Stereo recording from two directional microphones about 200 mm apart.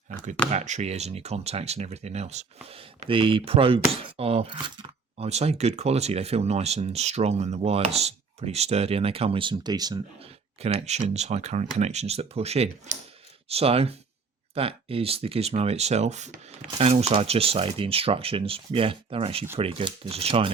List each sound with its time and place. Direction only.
0.5 s speech: 35° right (ahead or behind); by 10.0 s 20° right (ahead or behind)
10.6 s speech: 30° right (ahead or behind)